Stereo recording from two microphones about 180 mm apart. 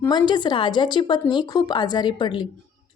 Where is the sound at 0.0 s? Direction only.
25° left (ahead or behind).